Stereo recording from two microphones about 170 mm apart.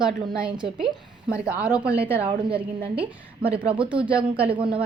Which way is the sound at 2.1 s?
35° right (ahead or behind).